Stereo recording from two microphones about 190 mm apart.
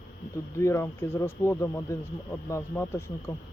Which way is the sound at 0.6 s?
15° left (ahead or behind).